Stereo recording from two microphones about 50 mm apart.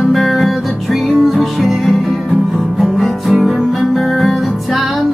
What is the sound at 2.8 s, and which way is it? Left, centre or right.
Guitar, centre.